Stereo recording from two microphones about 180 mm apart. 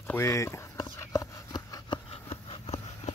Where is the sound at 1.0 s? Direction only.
20° left (ahead or behind).